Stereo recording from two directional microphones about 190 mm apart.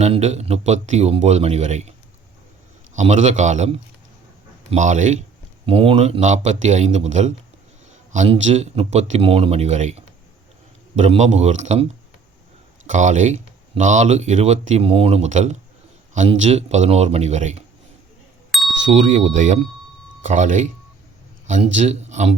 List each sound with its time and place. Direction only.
0.0 s speech: 35° right (ahead or behind)
2.9 s speech: 40° right (ahead or behind)
5.6 s speech: 30° right (ahead or behind)
18.8 s speech: 40° right (ahead or behind)